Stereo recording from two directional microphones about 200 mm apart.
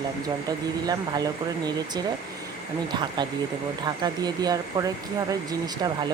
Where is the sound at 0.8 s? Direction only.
20° right (ahead or behind).